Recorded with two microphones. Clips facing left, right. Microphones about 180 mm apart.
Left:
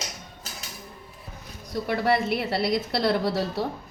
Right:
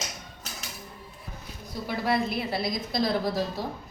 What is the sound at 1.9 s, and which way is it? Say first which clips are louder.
A woman's voice: left 3 dB; 65° left (ahead or behind).